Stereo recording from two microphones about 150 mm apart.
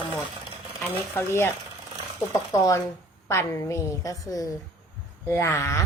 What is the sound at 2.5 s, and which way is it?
A woman's voice, 20° left (ahead or behind).